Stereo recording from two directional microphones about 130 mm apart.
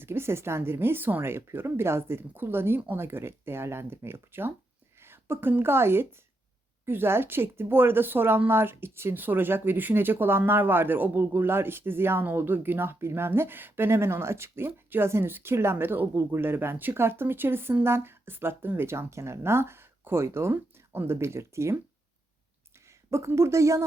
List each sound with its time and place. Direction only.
0.0 s a woman's voice: 20° right (ahead or behind)
22.9 s speech: 20° right (ahead or behind)